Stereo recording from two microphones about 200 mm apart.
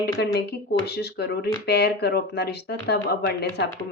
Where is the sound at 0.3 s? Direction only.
55° left (ahead or behind).